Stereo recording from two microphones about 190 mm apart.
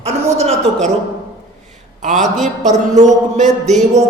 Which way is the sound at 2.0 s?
40° right (ahead or behind).